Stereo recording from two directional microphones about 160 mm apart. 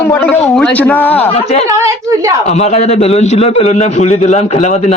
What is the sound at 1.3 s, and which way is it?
Speech, 45° left (ahead or behind).